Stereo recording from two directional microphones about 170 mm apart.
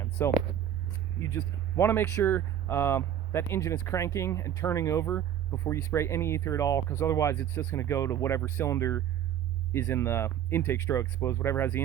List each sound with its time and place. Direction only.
0.2 s speech: 15° left (ahead or behind)